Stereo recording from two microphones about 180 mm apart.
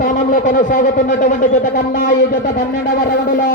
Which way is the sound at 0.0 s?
50° left (ahead or behind).